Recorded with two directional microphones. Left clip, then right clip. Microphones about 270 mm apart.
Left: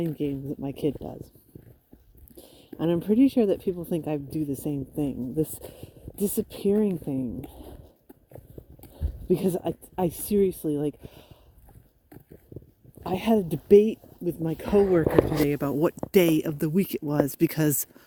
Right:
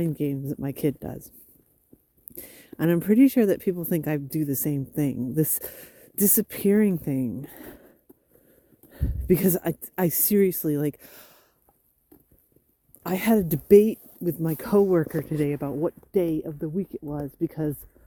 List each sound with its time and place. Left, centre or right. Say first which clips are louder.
0.0 s speech: right 1 dB; right
2.7 s speech: right 2 dB; right
8.9 s speech: right 3 dB; right
13.0 s speech: right 1 dB; right
15.6 s speech: left 3 dB; left